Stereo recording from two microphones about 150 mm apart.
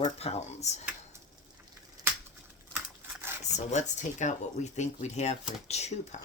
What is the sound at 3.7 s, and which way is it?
Speech, 50° left (ahead or behind).